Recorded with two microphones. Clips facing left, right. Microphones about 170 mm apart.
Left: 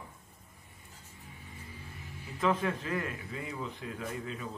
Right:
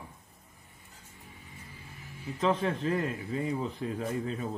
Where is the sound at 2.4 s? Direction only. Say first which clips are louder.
Right 2 dB; 25° right (ahead or behind).